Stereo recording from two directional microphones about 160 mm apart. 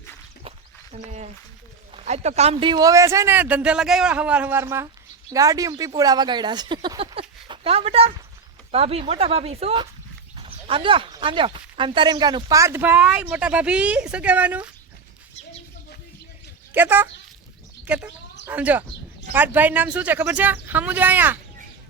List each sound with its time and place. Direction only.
0.9 s speech: 45° right (ahead or behind); by 14.7 s 10° right (ahead or behind)
16.7 s speech: 10° right (ahead or behind)